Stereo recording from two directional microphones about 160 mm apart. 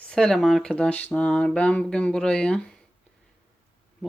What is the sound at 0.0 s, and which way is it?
Speech, 5° left (ahead or behind).